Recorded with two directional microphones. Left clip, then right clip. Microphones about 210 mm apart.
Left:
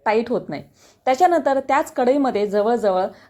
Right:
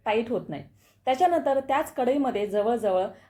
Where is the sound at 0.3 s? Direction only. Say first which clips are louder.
Left 6 dB; 25° left (ahead or behind).